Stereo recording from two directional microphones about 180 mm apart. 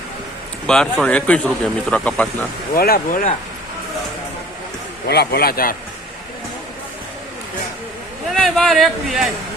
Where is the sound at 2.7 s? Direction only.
55° left (ahead or behind).